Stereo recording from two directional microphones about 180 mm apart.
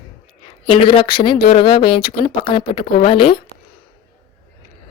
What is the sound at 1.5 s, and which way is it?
Speech, 30° left (ahead or behind).